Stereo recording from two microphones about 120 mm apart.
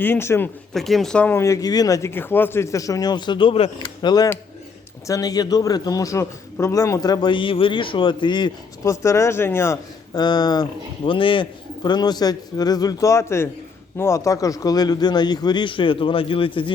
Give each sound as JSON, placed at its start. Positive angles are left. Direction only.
{"t": 0.0, "sound": "speech", "side_deg": 20}
{"t": 0.7, "sound": "speech", "side_deg": 0}
{"t": 1.4, "sound": "a man's voice", "side_deg": 30}
{"t": 8.8, "sound": "speech", "side_deg": 25}
{"t": 10.2, "sound": "a man's voice", "side_deg": 35}